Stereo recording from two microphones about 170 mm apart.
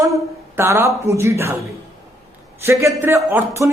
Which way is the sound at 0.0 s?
15° right (ahead or behind).